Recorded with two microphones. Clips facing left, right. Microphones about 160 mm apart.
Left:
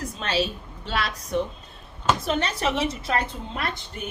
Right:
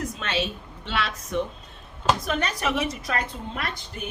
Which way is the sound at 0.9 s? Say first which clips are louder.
Left 1 dB; 40° left (ahead or behind).